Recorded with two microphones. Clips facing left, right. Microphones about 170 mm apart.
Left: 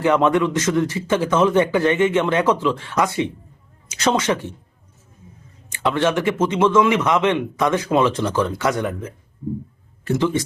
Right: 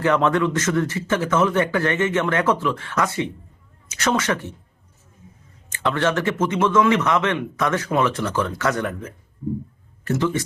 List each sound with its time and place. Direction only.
0.0 s a man's voice: 15° left (ahead or behind)
5.7 s a man's voice: 15° left (ahead or behind)
10.1 s a man's voice: 15° left (ahead or behind)